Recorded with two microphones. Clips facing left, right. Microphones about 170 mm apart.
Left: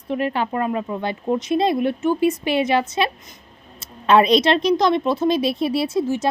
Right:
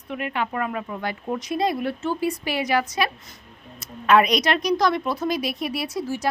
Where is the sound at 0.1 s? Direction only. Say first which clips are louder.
Left 5 dB; 35° left (ahead or behind).